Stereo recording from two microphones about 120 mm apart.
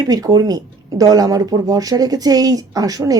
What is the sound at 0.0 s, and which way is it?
A woman's voice, 35° right (ahead or behind).